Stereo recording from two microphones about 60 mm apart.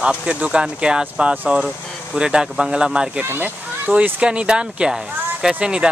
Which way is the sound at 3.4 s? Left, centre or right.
Right.